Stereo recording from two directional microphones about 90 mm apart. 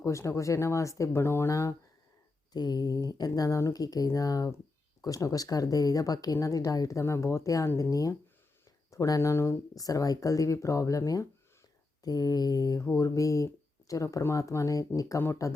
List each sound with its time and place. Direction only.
0.0 s speech: 35° left (ahead or behind)
2.5 s speech: 50° left (ahead or behind)
12.8 s speech: 35° left (ahead or behind)